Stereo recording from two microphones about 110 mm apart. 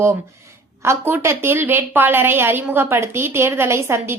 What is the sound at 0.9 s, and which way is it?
A woman's voice, 25° right (ahead or behind).